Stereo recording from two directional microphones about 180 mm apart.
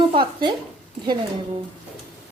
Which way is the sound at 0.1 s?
30° right (ahead or behind).